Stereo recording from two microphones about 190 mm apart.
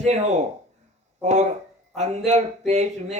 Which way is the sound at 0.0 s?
35° right (ahead or behind).